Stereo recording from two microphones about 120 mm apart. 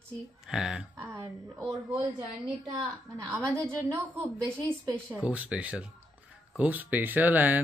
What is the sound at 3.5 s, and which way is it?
Speech, 20° right (ahead or behind).